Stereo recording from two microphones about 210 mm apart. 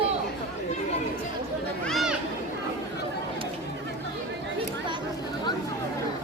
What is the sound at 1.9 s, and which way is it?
Speech, centre (ahead or behind).